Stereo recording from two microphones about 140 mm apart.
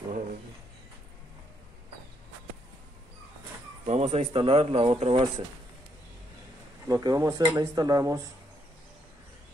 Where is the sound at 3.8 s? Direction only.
50° right (ahead or behind).